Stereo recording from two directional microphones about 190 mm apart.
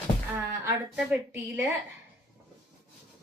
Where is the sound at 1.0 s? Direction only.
15° right (ahead or behind).